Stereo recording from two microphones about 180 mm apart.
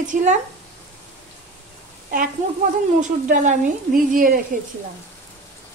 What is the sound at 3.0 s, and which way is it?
A woman's voice, 45° right (ahead or behind).